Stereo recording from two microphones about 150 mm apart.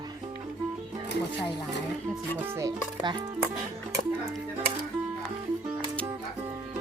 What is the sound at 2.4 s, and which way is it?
Speech, 20° right (ahead or behind).